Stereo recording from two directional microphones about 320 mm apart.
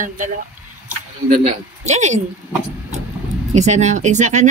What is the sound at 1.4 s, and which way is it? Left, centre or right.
Speech, right.